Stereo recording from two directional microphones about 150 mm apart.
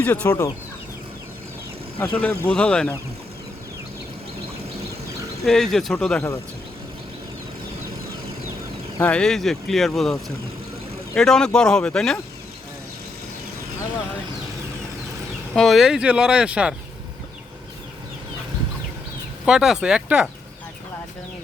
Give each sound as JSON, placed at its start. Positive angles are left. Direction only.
{"t": 0.0, "sound": "speech", "side_deg": 10}
{"t": 0.3, "sound": "speech", "side_deg": 25}
{"t": 2.0, "sound": "speech", "side_deg": 15}
{"t": 5.5, "sound": "speech", "side_deg": 5}
{"t": 9.0, "sound": "speech", "side_deg": 10}
{"t": 15.5, "sound": "speech", "side_deg": 0}
{"t": 19.5, "sound": "speech", "side_deg": -5}